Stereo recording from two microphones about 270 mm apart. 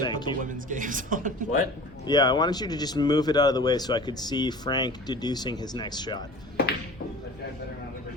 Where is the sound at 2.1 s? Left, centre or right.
Centre.